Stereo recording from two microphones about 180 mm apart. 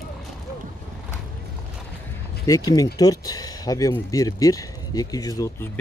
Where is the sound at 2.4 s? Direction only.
20° left (ahead or behind).